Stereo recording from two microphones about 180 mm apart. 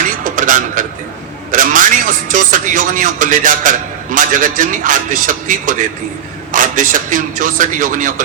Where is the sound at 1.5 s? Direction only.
45° right (ahead or behind).